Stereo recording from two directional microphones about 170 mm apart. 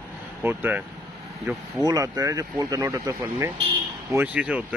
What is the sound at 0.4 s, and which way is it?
Speech, 10° right (ahead or behind).